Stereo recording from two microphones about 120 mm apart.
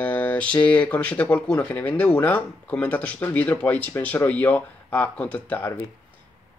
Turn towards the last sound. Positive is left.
turn(degrees=10)  # may be behind; listen again after turning